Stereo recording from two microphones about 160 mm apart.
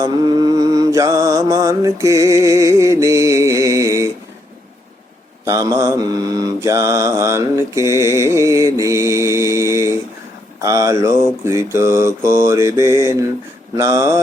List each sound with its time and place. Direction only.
0.0 s mantra: 25° right (ahead or behind)
5.5 s mantra: 20° right (ahead or behind)
10.6 s speech: 20° right (ahead or behind)
11.4 s mantra: 20° right (ahead or behind)